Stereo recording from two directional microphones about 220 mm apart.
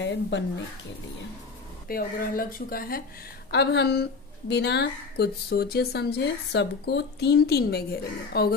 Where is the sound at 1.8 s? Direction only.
40° left (ahead or behind).